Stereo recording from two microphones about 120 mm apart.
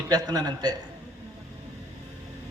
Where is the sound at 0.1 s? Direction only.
35° right (ahead or behind).